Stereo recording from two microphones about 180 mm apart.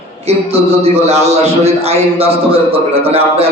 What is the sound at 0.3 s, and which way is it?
A man's voice, 35° right (ahead or behind).